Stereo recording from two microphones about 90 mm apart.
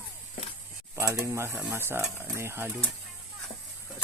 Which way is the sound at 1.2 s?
30° right (ahead or behind).